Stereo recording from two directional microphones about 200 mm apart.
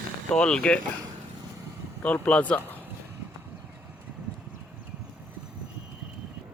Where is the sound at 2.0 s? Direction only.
5° left (ahead or behind).